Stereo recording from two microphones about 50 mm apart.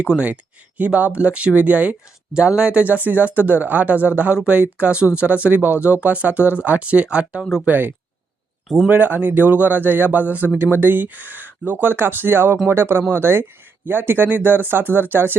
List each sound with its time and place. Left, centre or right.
0.1 s speech: right
7.6 s speech: right
8.6 s speech: centre
8.9 s speech: right